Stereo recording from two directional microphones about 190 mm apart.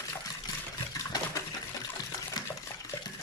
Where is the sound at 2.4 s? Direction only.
20° left (ahead or behind).